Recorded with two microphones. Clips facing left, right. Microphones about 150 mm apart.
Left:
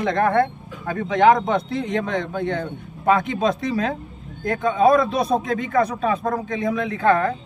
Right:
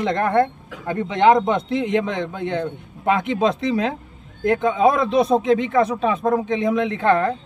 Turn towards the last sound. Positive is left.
turn(degrees=-25)  # may be behind; listen again after turning